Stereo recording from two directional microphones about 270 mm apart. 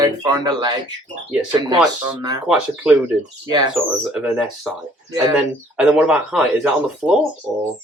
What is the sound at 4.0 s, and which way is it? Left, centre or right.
Speech, centre.